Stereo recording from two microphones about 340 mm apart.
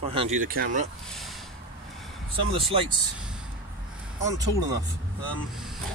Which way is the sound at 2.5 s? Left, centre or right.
Centre.